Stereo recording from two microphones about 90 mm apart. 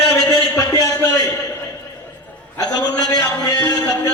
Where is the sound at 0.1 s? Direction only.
30° left (ahead or behind).